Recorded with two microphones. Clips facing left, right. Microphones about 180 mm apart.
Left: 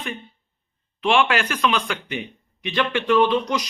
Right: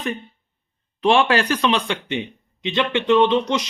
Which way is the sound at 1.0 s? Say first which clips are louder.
Right 3 dB; 35° right (ahead or behind).